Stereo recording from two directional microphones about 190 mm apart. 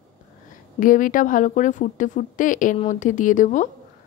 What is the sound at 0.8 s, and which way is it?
A woman's voice, 45° left (ahead or behind).